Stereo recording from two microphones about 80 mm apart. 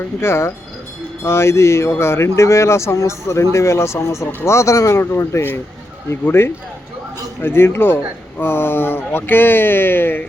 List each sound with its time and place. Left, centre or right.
0.2 s speech: left